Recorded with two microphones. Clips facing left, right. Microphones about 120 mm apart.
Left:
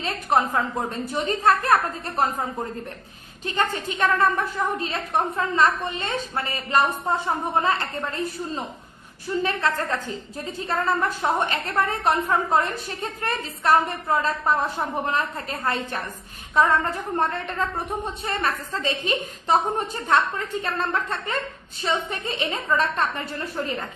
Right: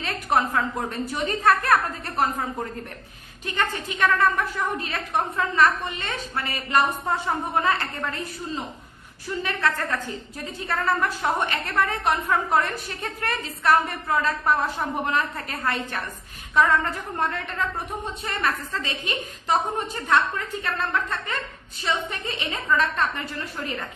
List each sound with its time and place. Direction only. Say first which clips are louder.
0.0 s a woman's voice: left 1 dB; 25° left (ahead or behind)
1.6 s a woman's voice: left 1 dB; 15° left (ahead or behind)
3.4 s a woman's voice: left 2 dB; 30° left (ahead or behind)
9.4 s a woman's voice: left 1 dB; 25° left (ahead or behind)